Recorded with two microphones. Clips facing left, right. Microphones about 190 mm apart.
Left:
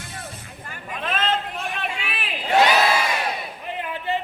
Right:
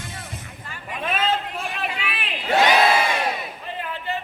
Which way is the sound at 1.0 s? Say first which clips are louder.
Right 1 dB; 10° right (ahead or behind).